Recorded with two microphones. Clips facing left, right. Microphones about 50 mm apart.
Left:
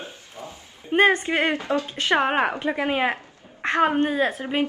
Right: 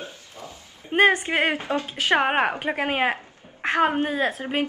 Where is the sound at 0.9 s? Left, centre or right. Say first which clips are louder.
Even; centre.